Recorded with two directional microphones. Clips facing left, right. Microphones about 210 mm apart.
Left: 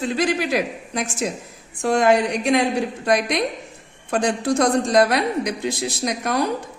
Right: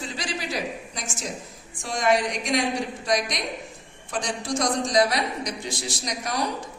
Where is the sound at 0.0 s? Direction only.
55° left (ahead or behind).